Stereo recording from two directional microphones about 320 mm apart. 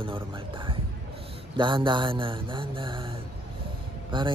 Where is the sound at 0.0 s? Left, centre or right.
Centre.